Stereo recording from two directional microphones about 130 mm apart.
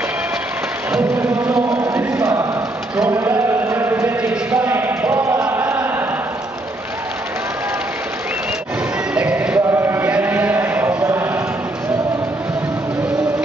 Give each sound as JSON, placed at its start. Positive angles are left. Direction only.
{"t": 0.9, "sound": "music", "side_deg": -10}
{"t": 1.5, "sound": "chant", "side_deg": -25}
{"t": 9.1, "sound": "music", "side_deg": -10}
{"t": 9.7, "sound": "chant", "side_deg": -15}
{"t": 11.1, "sound": "clip-clop", "side_deg": -20}